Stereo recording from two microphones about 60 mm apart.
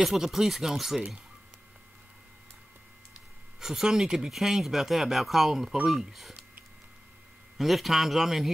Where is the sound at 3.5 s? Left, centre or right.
Centre.